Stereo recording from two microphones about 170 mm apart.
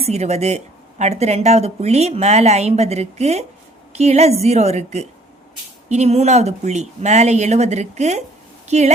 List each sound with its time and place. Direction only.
0.0 s speech: 40° right (ahead or behind)